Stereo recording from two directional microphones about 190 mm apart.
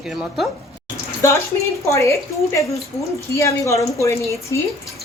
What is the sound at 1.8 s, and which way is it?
A woman's voice, 15° left (ahead or behind).